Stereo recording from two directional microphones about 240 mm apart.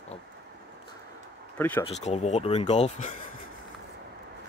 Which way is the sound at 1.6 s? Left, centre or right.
Centre.